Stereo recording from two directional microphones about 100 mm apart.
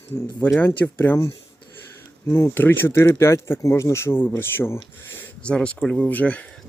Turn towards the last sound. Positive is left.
turn(degrees=15)  # may be behind; listen again after turning